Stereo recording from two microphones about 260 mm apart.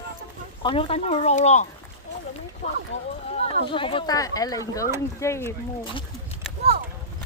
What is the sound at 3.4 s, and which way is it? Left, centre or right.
Speech, centre.